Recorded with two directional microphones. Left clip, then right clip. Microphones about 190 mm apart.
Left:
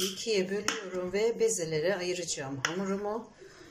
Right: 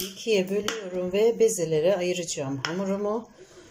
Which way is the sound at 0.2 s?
15° right (ahead or behind).